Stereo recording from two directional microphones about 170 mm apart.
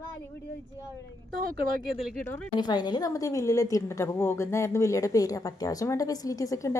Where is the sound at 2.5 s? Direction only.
25° left (ahead or behind).